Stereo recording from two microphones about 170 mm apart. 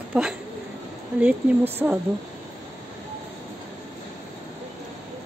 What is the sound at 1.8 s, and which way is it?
Speech, 5° right (ahead or behind).